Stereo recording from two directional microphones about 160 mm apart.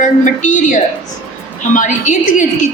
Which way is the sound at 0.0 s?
55° left (ahead or behind).